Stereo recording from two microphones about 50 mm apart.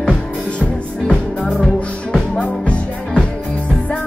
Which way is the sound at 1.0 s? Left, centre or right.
Centre.